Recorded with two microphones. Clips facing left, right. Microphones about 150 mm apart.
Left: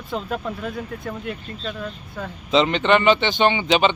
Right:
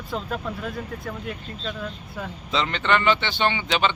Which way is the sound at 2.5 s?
20° left (ahead or behind).